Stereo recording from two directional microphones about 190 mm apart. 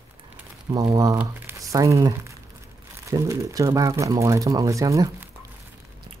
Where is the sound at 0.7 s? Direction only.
20° right (ahead or behind).